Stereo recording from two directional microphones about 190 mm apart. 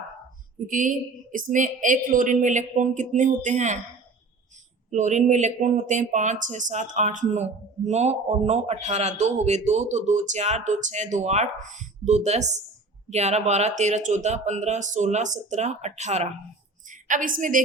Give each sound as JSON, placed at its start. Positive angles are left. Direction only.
{"t": 0.7, "sound": "speech", "side_deg": -45}
{"t": 4.9, "sound": "a man's voice", "side_deg": -40}